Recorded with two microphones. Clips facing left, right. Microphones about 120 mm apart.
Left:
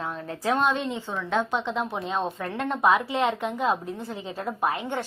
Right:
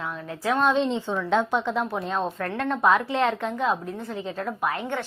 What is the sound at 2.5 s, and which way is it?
A woman's voice, 15° left (ahead or behind).